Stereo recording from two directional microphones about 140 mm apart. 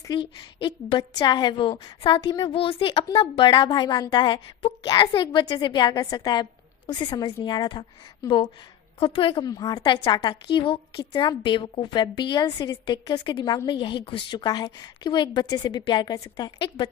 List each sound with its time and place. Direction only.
0.1 s a woman's voice: 35° left (ahead or behind)
9.0 s a woman's voice: 40° left (ahead or behind)